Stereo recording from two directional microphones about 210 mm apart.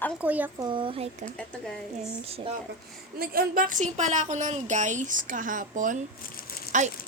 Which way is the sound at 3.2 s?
45° right (ahead or behind).